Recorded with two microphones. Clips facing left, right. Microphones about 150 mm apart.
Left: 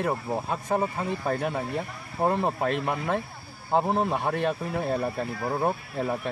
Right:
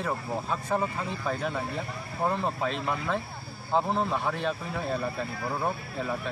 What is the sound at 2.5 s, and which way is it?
Speech, 55° left (ahead or behind).